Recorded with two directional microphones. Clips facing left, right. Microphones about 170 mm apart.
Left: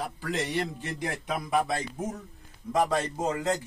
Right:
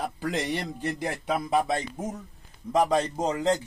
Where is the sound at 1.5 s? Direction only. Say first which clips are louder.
Even; 20° right (ahead or behind).